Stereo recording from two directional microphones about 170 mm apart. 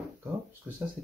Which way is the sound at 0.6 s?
5° right (ahead or behind).